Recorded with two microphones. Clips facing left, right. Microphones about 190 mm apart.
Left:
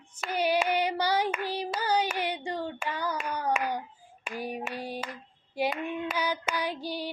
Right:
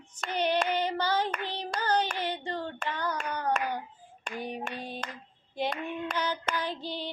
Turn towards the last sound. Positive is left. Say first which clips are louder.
# left 2 dB
turn(degrees=10)  # may be behind; listen again after turning